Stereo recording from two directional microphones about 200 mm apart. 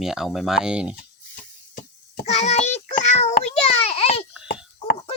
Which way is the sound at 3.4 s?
30° left (ahead or behind).